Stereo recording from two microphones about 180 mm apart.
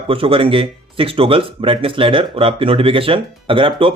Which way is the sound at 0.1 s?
30° right (ahead or behind).